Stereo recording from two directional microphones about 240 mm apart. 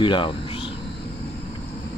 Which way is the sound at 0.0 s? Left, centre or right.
Centre.